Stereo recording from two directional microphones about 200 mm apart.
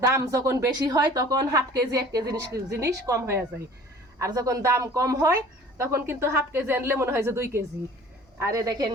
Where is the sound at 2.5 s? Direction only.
55° right (ahead or behind).